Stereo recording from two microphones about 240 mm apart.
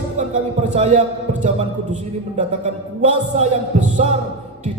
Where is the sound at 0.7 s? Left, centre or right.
Right.